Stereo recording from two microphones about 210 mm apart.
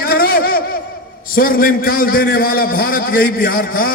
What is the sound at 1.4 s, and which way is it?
A man's voice, 45° left (ahead or behind).